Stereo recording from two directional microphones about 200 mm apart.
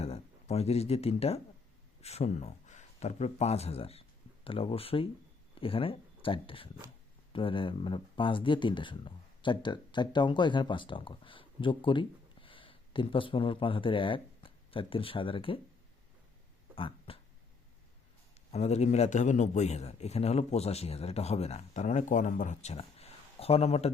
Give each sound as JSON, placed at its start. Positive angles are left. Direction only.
{"t": 0.0, "sound": "speech", "side_deg": 30}
{"t": 16.7, "sound": "a sound", "side_deg": 25}
{"t": 18.5, "sound": "a man's voice", "side_deg": 35}